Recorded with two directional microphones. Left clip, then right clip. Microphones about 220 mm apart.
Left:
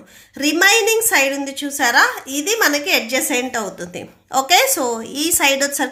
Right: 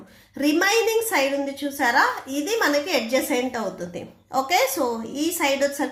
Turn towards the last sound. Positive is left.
turn(degrees=35)  # may be behind; listen again after turning